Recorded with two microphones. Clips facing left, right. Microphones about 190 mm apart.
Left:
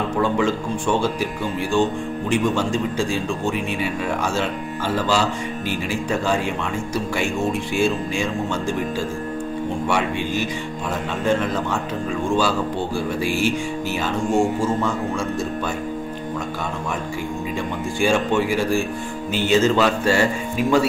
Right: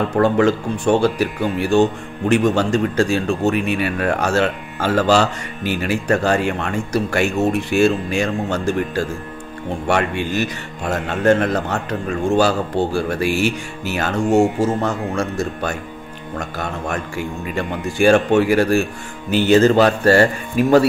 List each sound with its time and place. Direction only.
0.1 s speech: 65° right (ahead or behind)
19.3 s speech: 60° right (ahead or behind)